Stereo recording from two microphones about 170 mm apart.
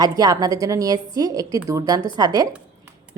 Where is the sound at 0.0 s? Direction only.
20° right (ahead or behind).